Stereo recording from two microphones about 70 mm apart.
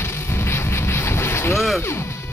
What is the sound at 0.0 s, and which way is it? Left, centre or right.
Boat, left.